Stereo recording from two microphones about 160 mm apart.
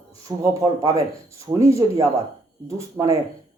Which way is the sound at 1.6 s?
20° right (ahead or behind).